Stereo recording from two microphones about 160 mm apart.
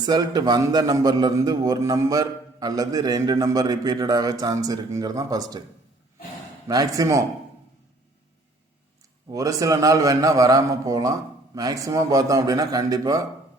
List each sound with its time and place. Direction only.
0.0 s a man's voice: 25° right (ahead or behind)
6.7 s a man's voice: 20° right (ahead or behind)
9.3 s a man's voice: 20° right (ahead or behind)